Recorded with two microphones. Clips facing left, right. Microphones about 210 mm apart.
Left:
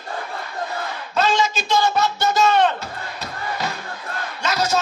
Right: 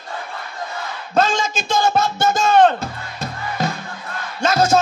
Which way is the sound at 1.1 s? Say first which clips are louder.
Right 1 dB; 50° right (ahead or behind).